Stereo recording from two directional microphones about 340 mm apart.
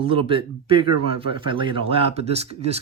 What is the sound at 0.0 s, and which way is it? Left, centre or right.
Speech, centre.